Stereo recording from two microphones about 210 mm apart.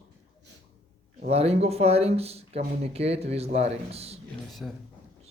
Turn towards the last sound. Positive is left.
turn(degrees=0)  # may be behind; listen again after turning